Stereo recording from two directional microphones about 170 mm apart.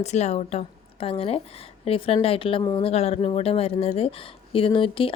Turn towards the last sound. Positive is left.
turn(degrees=30)  # may be behind; listen again after turning